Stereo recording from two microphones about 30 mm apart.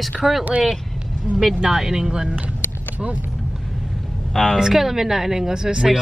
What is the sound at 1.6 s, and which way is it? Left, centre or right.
Speech, centre.